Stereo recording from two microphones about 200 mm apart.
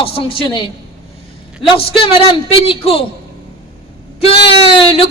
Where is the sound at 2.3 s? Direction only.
30° left (ahead or behind).